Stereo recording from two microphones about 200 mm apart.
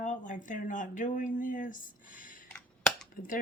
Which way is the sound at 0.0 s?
40° left (ahead or behind).